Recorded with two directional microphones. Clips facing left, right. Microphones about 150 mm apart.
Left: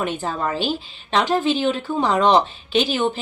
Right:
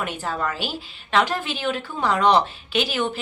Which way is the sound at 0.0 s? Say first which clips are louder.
Left 3 dB; 20° left (ahead or behind).